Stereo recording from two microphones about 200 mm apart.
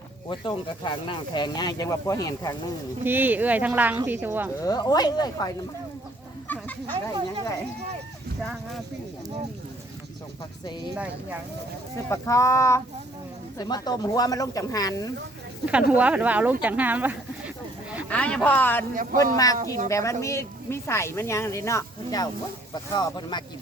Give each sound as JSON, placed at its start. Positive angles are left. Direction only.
{"t": 0.3, "sound": "speech", "side_deg": 25}
{"t": 3.0, "sound": "speech", "side_deg": -10}
{"t": 4.6, "sound": "speech", "side_deg": 20}
{"t": 6.5, "sound": "a sound", "side_deg": 10}
{"t": 6.9, "sound": "speech", "side_deg": -25}
{"t": 10.9, "sound": "speech", "side_deg": -5}
{"t": 12.0, "sound": "speech", "side_deg": 15}
{"t": 15.9, "sound": "speech", "side_deg": -5}
{"t": 18.1, "sound": "speech", "side_deg": 5}
{"t": 19.1, "sound": "a woman's voice", "side_deg": -45}
{"t": 19.9, "sound": "speech", "side_deg": 15}